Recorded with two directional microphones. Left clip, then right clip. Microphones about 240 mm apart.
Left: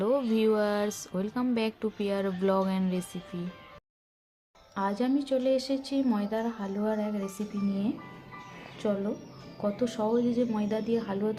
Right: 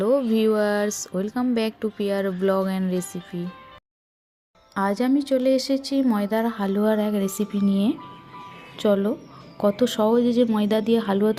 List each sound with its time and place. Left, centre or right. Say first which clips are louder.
0.0 s speech: right 6 dB; right
4.7 s speech: right 7 dB; right